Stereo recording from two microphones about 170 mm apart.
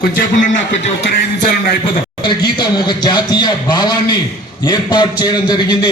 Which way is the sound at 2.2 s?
25° left (ahead or behind).